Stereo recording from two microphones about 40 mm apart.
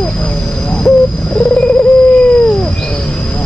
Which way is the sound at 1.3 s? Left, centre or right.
Left.